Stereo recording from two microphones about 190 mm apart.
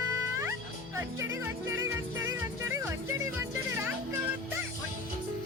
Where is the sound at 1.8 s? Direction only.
15° right (ahead or behind).